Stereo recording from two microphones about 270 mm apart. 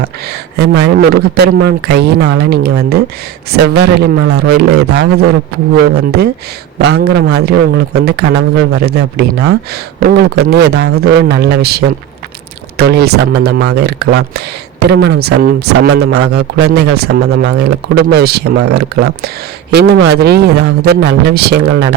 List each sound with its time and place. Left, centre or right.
0.0 s speech: right